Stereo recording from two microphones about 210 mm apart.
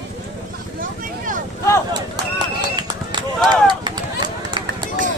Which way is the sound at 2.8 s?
20° right (ahead or behind).